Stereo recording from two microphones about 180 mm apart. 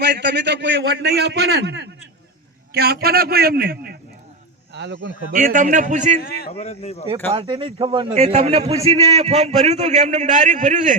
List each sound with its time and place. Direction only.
0.0 s a man's voice: 70° right (ahead or behind)
2.7 s a man's voice: 60° right (ahead or behind)
4.7 s speech: 75° right (ahead or behind)
5.3 s a man's voice: 50° right (ahead or behind)
6.5 s speech: 35° left (ahead or behind)
7.3 s a man's voice: 25° right (ahead or behind); by 10.9 s 45° right (ahead or behind)